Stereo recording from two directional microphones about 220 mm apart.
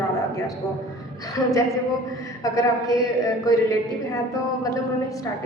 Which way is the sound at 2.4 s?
15° left (ahead or behind).